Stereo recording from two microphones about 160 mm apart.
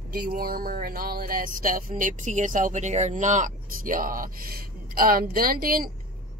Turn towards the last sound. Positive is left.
turn(degrees=-65)  # may be behind; listen again after turning